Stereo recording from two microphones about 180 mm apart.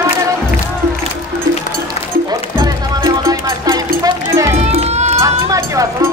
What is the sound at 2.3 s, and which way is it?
Music, 20° right (ahead or behind).